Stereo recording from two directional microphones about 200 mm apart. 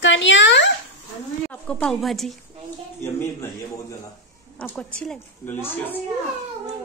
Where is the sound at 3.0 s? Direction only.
15° left (ahead or behind).